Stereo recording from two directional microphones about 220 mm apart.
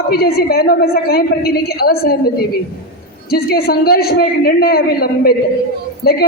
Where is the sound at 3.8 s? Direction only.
45° left (ahead or behind).